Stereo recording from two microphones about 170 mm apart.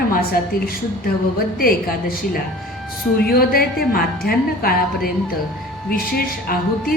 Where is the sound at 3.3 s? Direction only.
60° left (ahead or behind).